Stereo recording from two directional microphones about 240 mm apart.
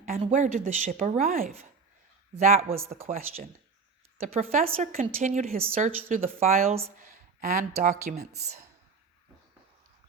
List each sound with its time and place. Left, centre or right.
0.0 s a woman's voice: right
3.0 s a woman's voice: right
7.0 s a sound: right
7.8 s a woman's voice: right
8.4 s a woman's voice: right